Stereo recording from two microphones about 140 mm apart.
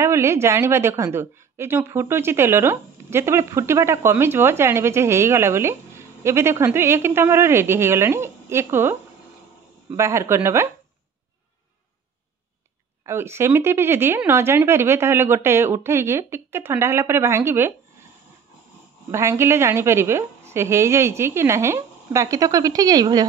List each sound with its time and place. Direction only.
0.0 s a woman's voice: 20° right (ahead or behind)
9.9 s a woman's voice: 20° right (ahead or behind)
13.0 s speech: 20° right (ahead or behind)
19.0 s a woman's voice: 20° right (ahead or behind)